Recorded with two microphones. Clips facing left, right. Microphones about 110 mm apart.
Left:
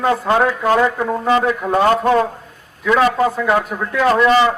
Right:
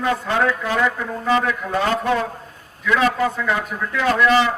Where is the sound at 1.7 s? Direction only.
40° left (ahead or behind).